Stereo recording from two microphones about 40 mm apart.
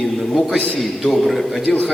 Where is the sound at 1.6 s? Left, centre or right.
Left.